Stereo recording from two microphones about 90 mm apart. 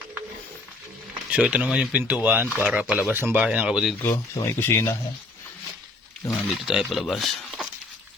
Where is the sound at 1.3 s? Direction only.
15° right (ahead or behind).